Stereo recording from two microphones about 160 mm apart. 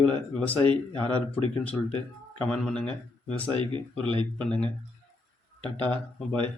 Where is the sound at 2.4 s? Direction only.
5° left (ahead or behind).